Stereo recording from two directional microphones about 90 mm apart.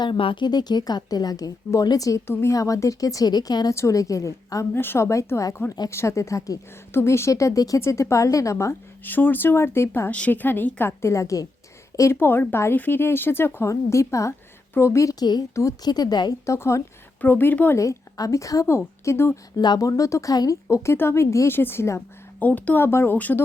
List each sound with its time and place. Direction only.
0.0 s a woman's voice: 70° left (ahead or behind); by 2.2 s 40° left (ahead or behind)
2.2 s a woman's voice: 30° left (ahead or behind)
4.7 s a woman's voice: 25° left (ahead or behind)
9.0 s speech: 20° left (ahead or behind)
10.1 s a woman's voice: 15° left (ahead or behind); by 15.1 s 30° left (ahead or behind)
15.2 s a woman's voice: 50° left (ahead or behind)
16.5 s a woman's voice: 35° left (ahead or behind)
17.2 s speech: 20° left (ahead or behind)
17.7 s a woman's voice: 40° left (ahead or behind)
19.5 s a woman's voice: 50° left (ahead or behind)
20.3 s a woman's voice: 45° left (ahead or behind)
20.7 s speech: 30° left (ahead or behind)
22.4 s speech: 20° left (ahead or behind)